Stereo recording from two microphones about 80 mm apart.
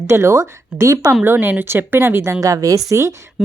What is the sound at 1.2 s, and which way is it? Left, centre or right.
Speech, right.